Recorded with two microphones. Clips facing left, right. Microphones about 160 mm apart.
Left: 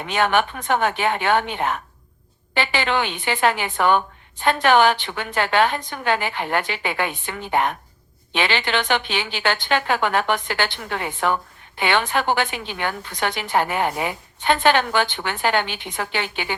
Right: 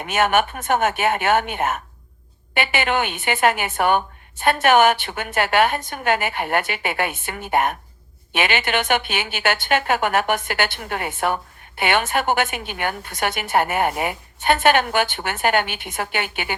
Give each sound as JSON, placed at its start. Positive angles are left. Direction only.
{"t": 0.0, "sound": "a woman's voice", "side_deg": -45}
{"t": 2.8, "sound": "a woman's voice", "side_deg": -50}